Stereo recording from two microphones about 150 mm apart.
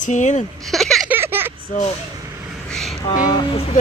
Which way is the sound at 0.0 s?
55° left (ahead or behind).